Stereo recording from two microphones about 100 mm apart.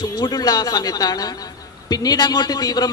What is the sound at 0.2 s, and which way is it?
A man's voice, 45° left (ahead or behind).